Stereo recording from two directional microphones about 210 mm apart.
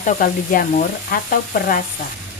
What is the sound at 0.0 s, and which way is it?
A woman's voice, 40° left (ahead or behind).